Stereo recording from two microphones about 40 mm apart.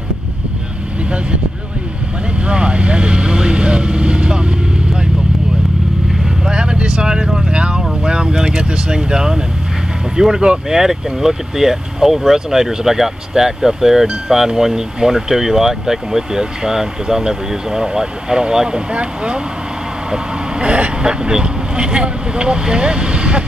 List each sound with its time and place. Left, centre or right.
2.4 s speech: right
6.4 s speech: right
20.6 s speech: right
21.0 s speech: centre